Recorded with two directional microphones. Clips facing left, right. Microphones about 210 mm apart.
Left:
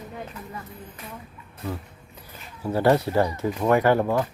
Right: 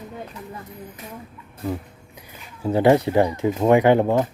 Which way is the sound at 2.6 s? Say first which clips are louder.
Right 4 dB; 20° right (ahead or behind).